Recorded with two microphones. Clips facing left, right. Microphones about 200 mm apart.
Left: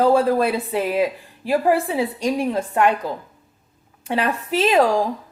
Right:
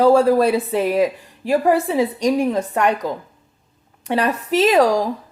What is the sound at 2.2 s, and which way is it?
Speech, 40° right (ahead or behind).